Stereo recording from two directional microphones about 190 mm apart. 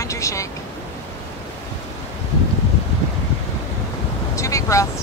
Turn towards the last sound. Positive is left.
turn(degrees=15)  # may be behind; listen again after turning